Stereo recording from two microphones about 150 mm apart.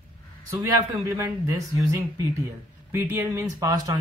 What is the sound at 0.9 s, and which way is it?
Speech, 15° right (ahead or behind).